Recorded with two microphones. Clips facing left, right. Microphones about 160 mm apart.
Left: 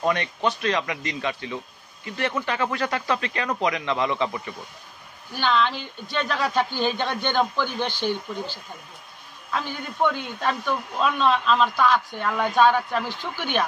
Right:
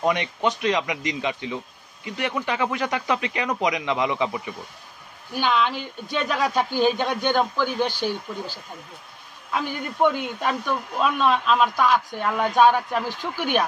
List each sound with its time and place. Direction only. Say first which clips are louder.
0.0 s a woman's voice: right 1 dB; 20° right (ahead or behind)
9.5 s a woman's voice: right 2 dB; 10° right (ahead or behind)